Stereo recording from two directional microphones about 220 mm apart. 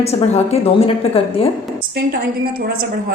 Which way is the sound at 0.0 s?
30° left (ahead or behind).